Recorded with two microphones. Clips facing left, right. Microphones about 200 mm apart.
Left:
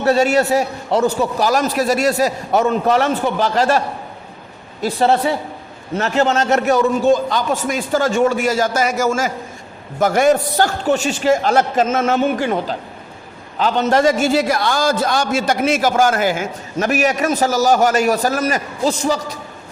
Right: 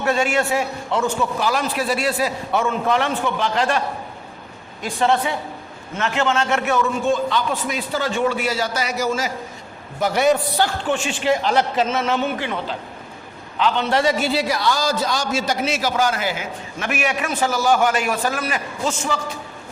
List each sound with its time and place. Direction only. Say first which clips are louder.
0.0 s a man's voice: left 5 dB; 40° left (ahead or behind)